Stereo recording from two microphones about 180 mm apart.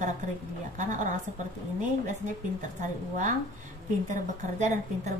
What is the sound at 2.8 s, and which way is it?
A woman's voice, 45° right (ahead or behind).